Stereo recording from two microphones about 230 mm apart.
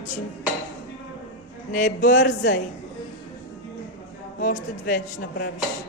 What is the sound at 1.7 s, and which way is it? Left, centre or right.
Speech, left.